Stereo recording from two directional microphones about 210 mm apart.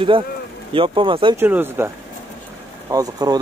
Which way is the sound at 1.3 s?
10° right (ahead or behind).